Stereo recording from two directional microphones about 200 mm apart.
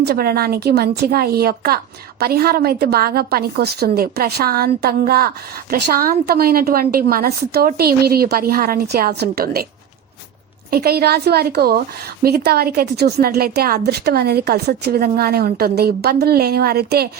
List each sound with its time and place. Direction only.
0.0 s a woman's voice: 50° right (ahead or behind)
10.7 s a woman's voice: 50° right (ahead or behind)